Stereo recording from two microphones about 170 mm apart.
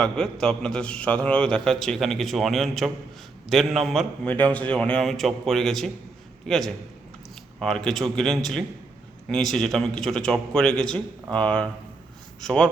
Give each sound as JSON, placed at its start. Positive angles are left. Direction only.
{"t": 0.0, "sound": "a man's voice", "side_deg": 5}
{"t": 7.9, "sound": "a man's voice", "side_deg": 0}